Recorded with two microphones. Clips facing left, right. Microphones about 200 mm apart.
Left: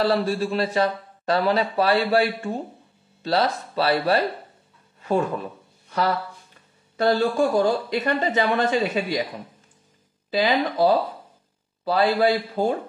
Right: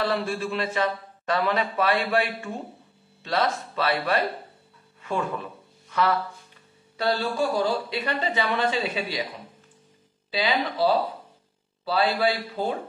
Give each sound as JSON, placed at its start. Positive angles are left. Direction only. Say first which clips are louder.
{"t": 0.0, "sound": "a man's voice", "louder": "left 5 dB", "side_deg": 35}
{"t": 5.0, "sound": "a sound", "louder": "left 6 dB", "side_deg": 40}
{"t": 7.0, "sound": "speech", "louder": "left 5 dB", "side_deg": 45}
{"t": 10.3, "sound": "speech", "louder": "left 4 dB", "side_deg": 45}